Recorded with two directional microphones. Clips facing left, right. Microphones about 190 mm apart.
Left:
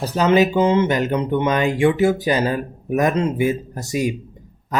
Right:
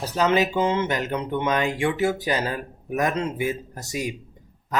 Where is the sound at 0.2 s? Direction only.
15° left (ahead or behind).